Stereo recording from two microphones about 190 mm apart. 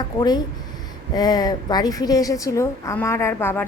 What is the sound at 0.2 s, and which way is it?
A woman's voice, 20° left (ahead or behind).